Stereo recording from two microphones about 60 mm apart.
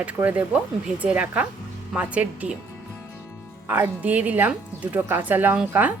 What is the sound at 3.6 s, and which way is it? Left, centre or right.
Speech, right.